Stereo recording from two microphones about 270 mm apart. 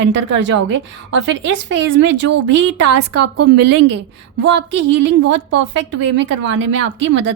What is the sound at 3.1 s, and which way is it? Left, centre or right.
Speech, right.